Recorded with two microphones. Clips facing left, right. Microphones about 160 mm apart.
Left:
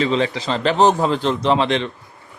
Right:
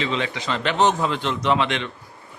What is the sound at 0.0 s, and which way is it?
Speech, 35° left (ahead or behind).